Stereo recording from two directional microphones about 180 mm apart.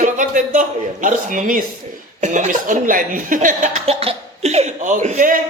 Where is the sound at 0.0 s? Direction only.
45° right (ahead or behind).